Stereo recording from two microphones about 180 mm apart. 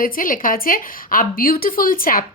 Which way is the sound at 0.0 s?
50° left (ahead or behind).